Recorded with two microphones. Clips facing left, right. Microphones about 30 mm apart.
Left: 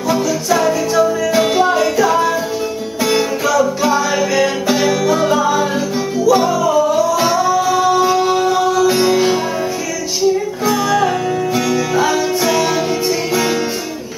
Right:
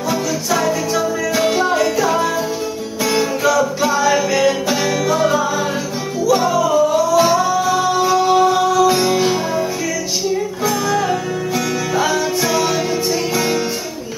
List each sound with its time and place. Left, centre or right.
0.1 s music: centre
10.6 s music: centre